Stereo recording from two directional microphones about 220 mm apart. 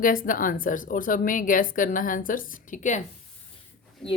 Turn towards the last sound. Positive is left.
turn(degrees=0)  # may be behind; listen again after turning